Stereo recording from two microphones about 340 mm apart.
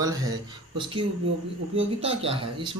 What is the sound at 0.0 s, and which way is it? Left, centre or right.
Speech, centre.